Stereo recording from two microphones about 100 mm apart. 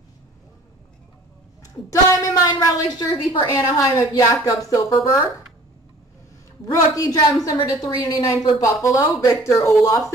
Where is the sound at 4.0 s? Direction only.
30° left (ahead or behind).